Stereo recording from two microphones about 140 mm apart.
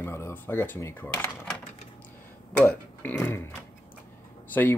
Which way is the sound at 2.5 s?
10° left (ahead or behind).